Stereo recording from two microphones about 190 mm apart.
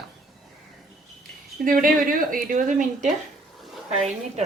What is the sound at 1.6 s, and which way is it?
A woman's voice, 45° right (ahead or behind).